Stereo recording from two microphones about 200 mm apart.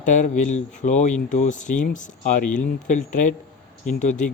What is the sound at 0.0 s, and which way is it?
A man's voice, 40° left (ahead or behind).